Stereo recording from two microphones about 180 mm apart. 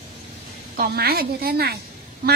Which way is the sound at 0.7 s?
55° right (ahead or behind).